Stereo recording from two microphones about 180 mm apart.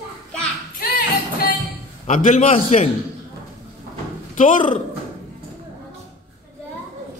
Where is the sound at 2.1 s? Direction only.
45° left (ahead or behind).